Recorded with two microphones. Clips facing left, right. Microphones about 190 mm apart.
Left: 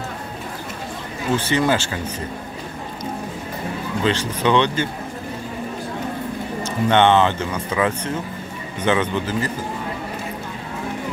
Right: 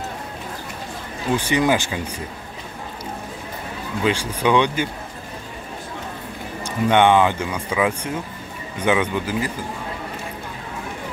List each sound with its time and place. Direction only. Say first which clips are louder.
1.3 s speech: even; 15° right (ahead or behind)
4.0 s speech: even; 10° right (ahead or behind)
6.6 s speech: even; 10° right (ahead or behind)